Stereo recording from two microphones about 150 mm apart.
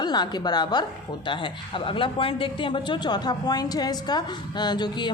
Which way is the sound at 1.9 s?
35° left (ahead or behind).